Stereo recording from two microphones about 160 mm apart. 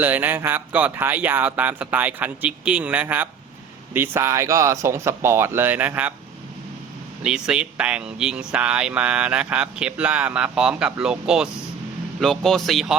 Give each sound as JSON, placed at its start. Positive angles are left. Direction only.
{"t": 0.0, "sound": "speech", "side_deg": -10}
{"t": 7.2, "sound": "speech", "side_deg": -5}